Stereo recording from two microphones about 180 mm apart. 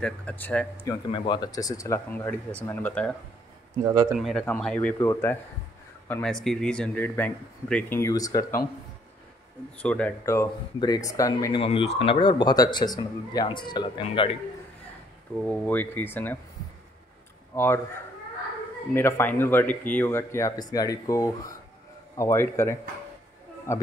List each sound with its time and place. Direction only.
0.0 s speech: 5° left (ahead or behind)
0.8 s speech: 25° left (ahead or behind); by 3.2 s 5° left (ahead or behind)
3.8 s speech: 20° right (ahead or behind)
4.1 s speech: centre (ahead or behind); by 8.5 s 20° left (ahead or behind)
9.8 s speech: 5° left (ahead or behind)
11.6 s speech: 30° left (ahead or behind)
15.4 s speech: 5° left (ahead or behind)
17.6 s speech: 15° left (ahead or behind)
18.9 s speech: 10° left (ahead or behind)